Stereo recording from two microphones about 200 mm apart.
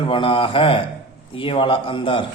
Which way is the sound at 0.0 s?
25° left (ahead or behind).